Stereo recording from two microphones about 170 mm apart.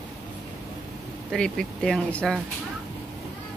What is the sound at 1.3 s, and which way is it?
Speech, 5° left (ahead or behind).